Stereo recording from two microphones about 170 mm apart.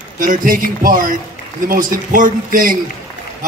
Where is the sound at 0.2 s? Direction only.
55° right (ahead or behind).